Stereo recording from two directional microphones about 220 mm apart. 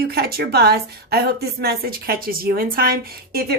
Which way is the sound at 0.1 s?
45° right (ahead or behind).